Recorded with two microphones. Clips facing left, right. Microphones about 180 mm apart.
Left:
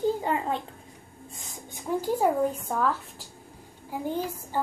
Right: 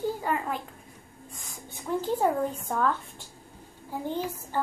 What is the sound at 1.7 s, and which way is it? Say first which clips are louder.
A woman's voice: left 1 dB; 15° left (ahead or behind).